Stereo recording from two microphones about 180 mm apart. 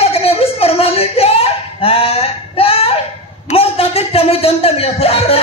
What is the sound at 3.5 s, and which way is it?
Music, 35° left (ahead or behind).